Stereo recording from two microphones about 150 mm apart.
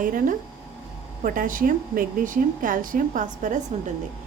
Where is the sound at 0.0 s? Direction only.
65° right (ahead or behind).